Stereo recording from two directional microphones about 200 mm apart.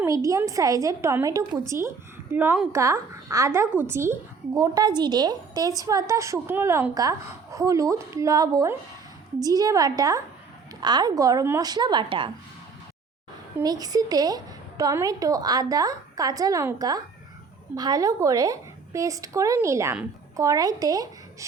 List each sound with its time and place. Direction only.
0.0 s a woman's voice: 15° right (ahead or behind)
13.6 s a woman's voice: 20° right (ahead or behind)